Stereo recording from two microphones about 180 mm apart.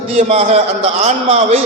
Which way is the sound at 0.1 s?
40° right (ahead or behind).